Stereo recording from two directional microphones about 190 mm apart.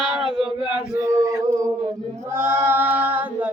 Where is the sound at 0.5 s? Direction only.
25° left (ahead or behind).